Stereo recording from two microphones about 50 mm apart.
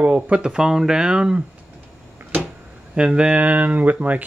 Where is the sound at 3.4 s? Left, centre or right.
Right.